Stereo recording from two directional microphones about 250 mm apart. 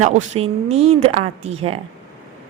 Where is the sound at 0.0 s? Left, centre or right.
Right.